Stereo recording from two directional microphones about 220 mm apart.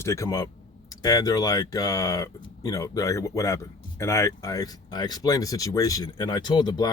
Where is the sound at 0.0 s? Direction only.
15° left (ahead or behind).